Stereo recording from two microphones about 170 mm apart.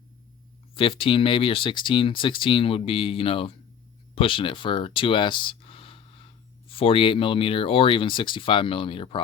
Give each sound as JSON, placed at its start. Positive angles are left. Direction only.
{"t": 0.8, "sound": "speech", "side_deg": 30}